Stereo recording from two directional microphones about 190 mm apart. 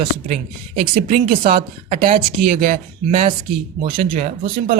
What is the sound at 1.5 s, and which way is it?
Speech, 30° right (ahead or behind).